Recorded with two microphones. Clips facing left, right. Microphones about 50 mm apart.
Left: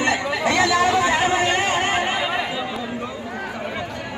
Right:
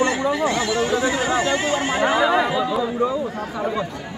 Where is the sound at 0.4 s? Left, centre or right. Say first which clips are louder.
Left 3 dB; left.